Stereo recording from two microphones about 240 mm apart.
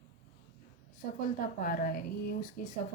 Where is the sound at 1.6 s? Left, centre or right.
Left.